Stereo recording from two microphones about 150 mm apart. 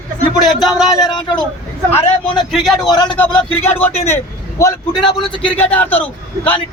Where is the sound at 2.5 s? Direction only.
Centre (ahead or behind).